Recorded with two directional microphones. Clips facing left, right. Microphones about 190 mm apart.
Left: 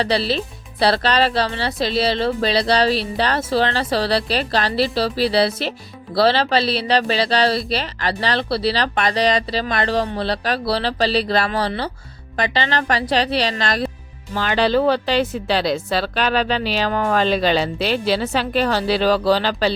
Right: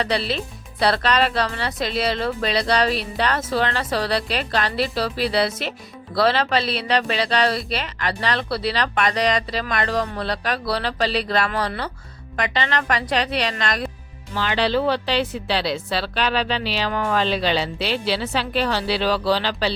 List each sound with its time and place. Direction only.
0.0 s a woman's voice: 35° left (ahead or behind)
14.3 s a woman's voice: 45° left (ahead or behind)